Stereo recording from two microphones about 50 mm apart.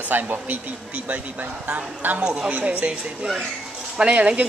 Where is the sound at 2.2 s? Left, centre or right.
Centre.